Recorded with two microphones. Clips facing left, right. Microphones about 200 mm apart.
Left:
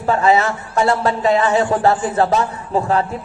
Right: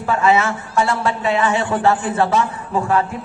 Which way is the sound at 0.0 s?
35° left (ahead or behind).